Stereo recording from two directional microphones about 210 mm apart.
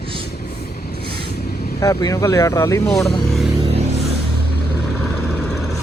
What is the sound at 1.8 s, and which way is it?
Speech, 15° left (ahead or behind).